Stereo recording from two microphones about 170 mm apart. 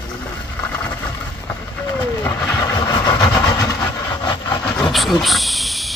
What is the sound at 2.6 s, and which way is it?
Vehicle, 25° left (ahead or behind).